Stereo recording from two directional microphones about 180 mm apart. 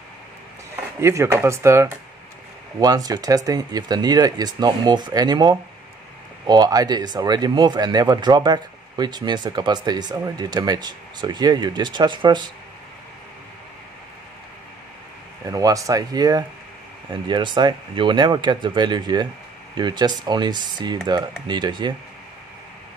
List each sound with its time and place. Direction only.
1.0 s speech: 15° right (ahead or behind)
15.4 s speech: 20° right (ahead or behind)